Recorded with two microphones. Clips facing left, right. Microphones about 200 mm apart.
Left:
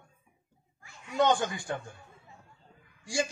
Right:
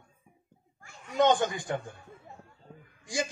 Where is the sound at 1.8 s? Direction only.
55° right (ahead or behind).